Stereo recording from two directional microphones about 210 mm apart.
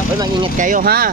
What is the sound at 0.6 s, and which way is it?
Speech, 40° right (ahead or behind).